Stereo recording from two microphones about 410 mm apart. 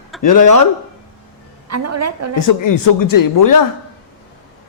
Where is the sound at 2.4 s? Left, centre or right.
Left.